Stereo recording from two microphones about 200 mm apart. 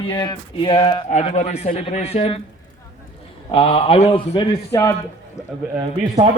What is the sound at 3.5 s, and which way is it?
A man's voice, 30° left (ahead or behind).